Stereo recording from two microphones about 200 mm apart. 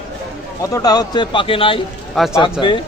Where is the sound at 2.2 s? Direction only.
Centre (ahead or behind).